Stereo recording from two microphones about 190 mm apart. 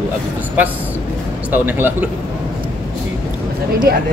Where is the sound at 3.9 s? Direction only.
55° right (ahead or behind).